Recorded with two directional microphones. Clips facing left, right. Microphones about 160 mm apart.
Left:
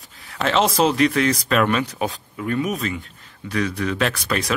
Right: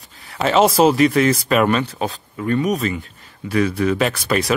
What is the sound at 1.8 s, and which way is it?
Speech, 15° left (ahead or behind).